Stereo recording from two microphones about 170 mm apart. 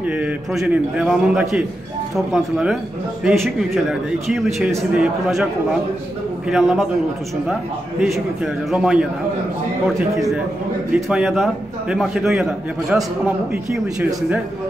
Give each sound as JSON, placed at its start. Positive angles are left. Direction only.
{"t": 0.0, "sound": "a man's voice", "side_deg": -5}
{"t": 6.5, "sound": "a man's voice", "side_deg": 0}
{"t": 8.0, "sound": "a man's voice", "side_deg": 0}
{"t": 11.1, "sound": "a man's voice", "side_deg": -5}